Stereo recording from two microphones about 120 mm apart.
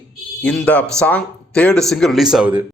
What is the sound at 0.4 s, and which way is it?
A man's voice, 10° left (ahead or behind).